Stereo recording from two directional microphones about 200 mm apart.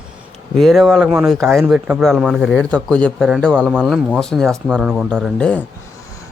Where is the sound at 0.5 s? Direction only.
Centre (ahead or behind).